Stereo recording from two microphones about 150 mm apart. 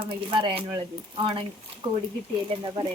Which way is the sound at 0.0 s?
35° right (ahead or behind).